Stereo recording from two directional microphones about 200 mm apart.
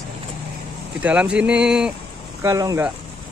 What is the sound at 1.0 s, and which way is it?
Speech, 5° right (ahead or behind).